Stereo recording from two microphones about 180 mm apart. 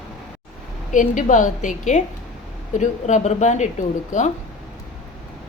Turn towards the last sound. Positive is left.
turn(degrees=45)  # may be behind; listen again after turning